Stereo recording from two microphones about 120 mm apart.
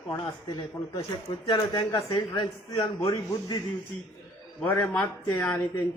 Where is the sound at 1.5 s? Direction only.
40° left (ahead or behind).